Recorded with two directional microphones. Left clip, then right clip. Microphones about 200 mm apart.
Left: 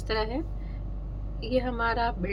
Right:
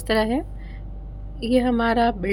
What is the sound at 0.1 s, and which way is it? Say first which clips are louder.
A woman's voice: right 8 dB; 50° right (ahead or behind).